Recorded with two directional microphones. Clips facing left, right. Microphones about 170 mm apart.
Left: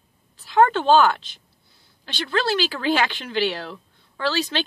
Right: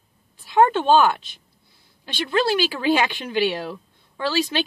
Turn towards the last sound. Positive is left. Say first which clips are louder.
# right 1 dB
turn(degrees=-10)  # may be behind; listen again after turning